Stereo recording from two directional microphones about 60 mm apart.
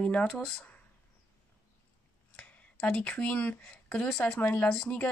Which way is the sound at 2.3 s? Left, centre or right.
Centre.